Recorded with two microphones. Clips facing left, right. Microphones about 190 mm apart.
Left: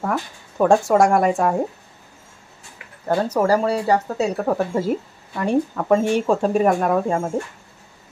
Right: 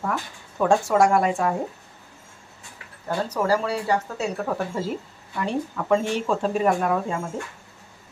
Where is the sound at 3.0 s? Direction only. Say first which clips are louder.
Left 5 dB; 45° left (ahead or behind).